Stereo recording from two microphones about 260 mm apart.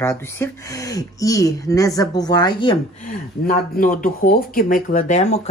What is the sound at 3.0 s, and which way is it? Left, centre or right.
Speech, left.